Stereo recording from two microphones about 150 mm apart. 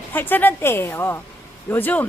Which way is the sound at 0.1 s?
15° left (ahead or behind).